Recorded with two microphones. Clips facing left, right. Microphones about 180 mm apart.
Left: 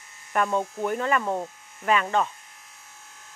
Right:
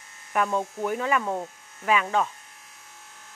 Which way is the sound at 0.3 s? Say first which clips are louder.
Left 1 dB; 5° right (ahead or behind).